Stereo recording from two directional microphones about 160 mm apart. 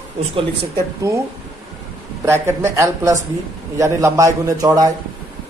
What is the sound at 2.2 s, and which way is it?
A man's voice, 15° right (ahead or behind).